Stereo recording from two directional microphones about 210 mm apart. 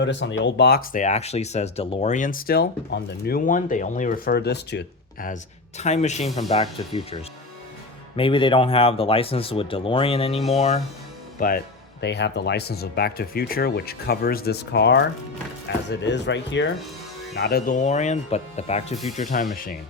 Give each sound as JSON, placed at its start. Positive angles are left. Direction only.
{"t": 0.0, "sound": "speech", "side_deg": 60}
{"t": 1.0, "sound": "speech", "side_deg": 30}
{"t": 5.3, "sound": "a man's voice", "side_deg": 30}
{"t": 11.3, "sound": "speech", "side_deg": 45}
{"t": 17.3, "sound": "speech", "side_deg": 50}